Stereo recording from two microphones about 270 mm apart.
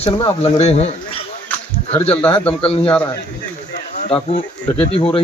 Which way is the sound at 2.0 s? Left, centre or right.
Centre.